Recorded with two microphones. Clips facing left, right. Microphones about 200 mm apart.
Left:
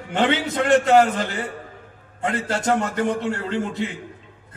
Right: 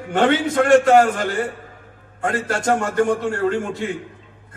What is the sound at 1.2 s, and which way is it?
Speech, 50° right (ahead or behind).